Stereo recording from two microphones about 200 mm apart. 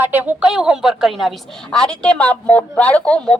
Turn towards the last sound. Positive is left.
turn(degrees=5)  # may be behind; listen again after turning